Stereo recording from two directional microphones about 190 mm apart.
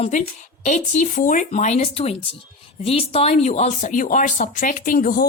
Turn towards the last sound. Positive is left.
turn(degrees=50)  # may be behind; listen again after turning